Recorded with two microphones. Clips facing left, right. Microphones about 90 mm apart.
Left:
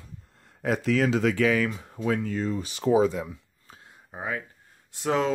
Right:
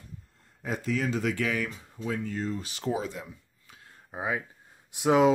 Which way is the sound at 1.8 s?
65° left (ahead or behind).